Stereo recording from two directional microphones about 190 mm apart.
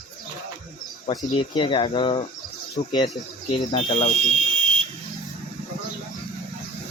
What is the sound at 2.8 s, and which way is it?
Speech, 40° left (ahead or behind).